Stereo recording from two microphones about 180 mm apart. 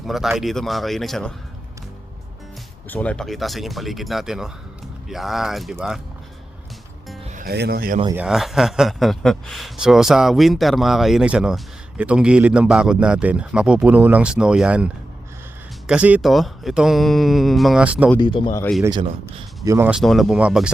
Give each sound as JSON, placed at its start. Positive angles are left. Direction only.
{"t": 0.0, "sound": "a man's voice", "side_deg": 0}
{"t": 2.9, "sound": "a man's voice", "side_deg": 5}
{"t": 7.4, "sound": "speech", "side_deg": -60}
{"t": 8.1, "sound": "a man's voice", "side_deg": -5}
{"t": 15.9, "sound": "a man's voice", "side_deg": -5}
{"t": 18.2, "sound": "a man's voice", "side_deg": 25}
{"t": 18.9, "sound": "speech", "side_deg": -20}
{"t": 19.9, "sound": "a man's voice", "side_deg": 0}